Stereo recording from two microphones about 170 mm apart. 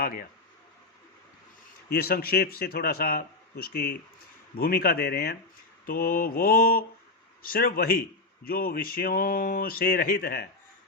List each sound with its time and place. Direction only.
0.0 s a man's voice: 60° left (ahead or behind)
1.9 s a man's voice: 65° left (ahead or behind)